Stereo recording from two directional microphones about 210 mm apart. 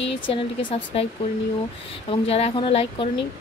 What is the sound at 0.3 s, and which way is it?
Speech, 25° left (ahead or behind).